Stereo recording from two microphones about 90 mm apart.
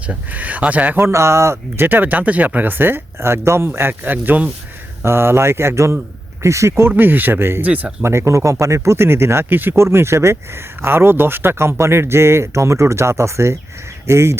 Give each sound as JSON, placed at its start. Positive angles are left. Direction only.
{"t": 0.1, "sound": "speech", "side_deg": -15}
{"t": 1.0, "sound": "speech", "side_deg": -30}
{"t": 6.9, "sound": "speech", "side_deg": -20}
{"t": 8.0, "sound": "speech", "side_deg": -35}